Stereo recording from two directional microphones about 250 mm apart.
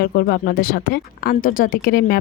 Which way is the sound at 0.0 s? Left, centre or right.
Left.